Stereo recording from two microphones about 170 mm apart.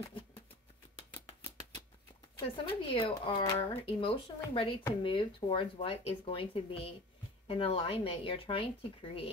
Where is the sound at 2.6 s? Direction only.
30° left (ahead or behind).